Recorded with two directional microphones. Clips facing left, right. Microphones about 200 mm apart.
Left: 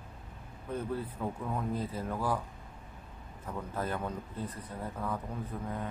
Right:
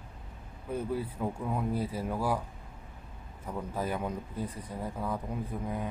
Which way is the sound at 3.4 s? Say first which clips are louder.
Right 2 dB; 10° right (ahead or behind).